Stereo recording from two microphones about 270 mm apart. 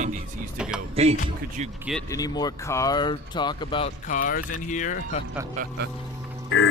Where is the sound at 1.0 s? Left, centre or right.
Right.